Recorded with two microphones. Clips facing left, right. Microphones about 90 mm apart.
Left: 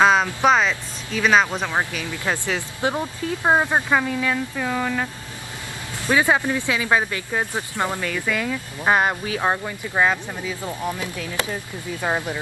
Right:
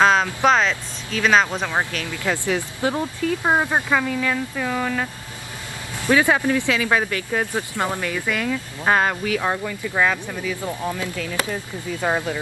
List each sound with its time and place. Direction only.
0.0 s speech: 5° left (ahead or behind)
2.8 s speech: 25° left (ahead or behind); by 5.1 s 5° left (ahead or behind)
6.0 s speech: 20° left (ahead or behind)
7.9 s speech: 10° right (ahead or behind)
8.4 s speech: 5° left (ahead or behind)
8.9 s speech: 25° left (ahead or behind)
9.9 s speech: 20° left (ahead or behind)
12.0 s speech: 15° right (ahead or behind)